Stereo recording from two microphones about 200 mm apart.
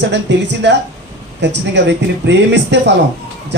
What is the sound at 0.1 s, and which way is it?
A man's voice, 60° right (ahead or behind).